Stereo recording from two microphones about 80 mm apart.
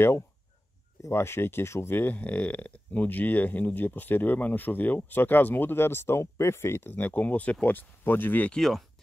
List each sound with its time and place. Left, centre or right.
1.0 s speech: left
8.5 s speech: centre